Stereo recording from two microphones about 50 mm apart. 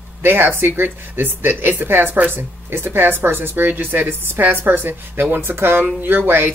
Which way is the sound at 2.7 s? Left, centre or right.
Right.